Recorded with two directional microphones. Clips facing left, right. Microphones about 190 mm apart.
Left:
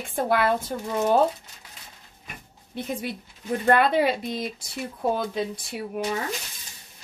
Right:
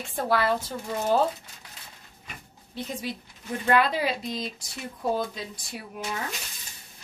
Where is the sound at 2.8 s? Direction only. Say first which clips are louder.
Left 3 dB; 55° left (ahead or behind).